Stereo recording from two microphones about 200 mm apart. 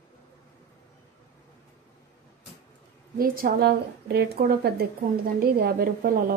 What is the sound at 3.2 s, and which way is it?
Speech, 45° right (ahead or behind).